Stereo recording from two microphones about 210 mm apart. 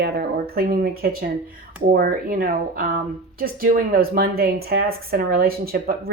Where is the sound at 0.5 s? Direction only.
45° right (ahead or behind).